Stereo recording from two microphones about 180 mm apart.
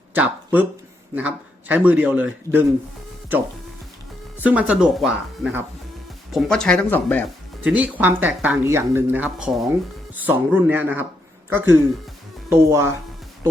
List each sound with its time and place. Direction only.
0.1 s a sound: 10° right (ahead or behind)
1.1 s speech: 10° right (ahead or behind); by 7.3 s 10° left (ahead or behind)
7.6 s speech: 10° right (ahead or behind)